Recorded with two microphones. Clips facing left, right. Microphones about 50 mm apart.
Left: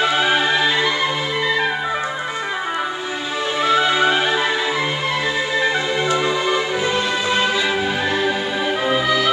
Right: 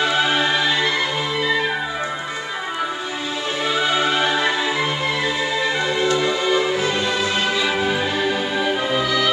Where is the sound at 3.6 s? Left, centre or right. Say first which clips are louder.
Left 4 dB; centre.